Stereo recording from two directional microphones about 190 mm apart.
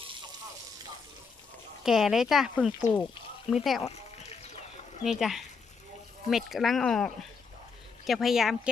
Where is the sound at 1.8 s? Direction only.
Centre (ahead or behind).